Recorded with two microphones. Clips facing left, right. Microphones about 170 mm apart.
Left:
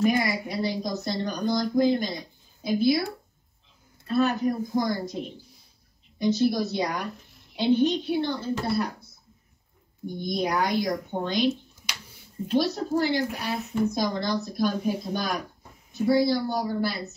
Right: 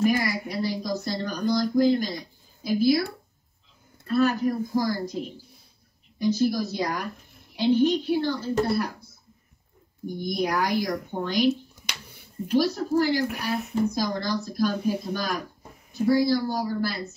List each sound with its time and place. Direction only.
0.1 s a woman's voice: 20° left (ahead or behind)
4.1 s speech: 20° left (ahead or behind)
10.1 s speech: 20° left (ahead or behind)